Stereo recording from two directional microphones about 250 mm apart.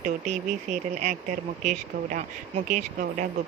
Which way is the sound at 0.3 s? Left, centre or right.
Right.